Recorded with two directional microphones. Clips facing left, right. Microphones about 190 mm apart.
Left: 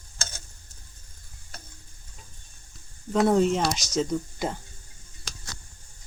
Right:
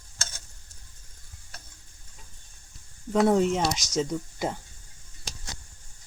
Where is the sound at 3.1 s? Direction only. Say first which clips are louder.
Left 1 dB; 15° right (ahead or behind).